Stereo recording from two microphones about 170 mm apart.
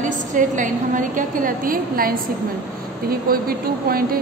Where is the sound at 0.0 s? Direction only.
50° right (ahead or behind).